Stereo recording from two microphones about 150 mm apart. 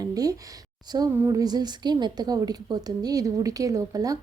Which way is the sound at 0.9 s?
25° right (ahead or behind).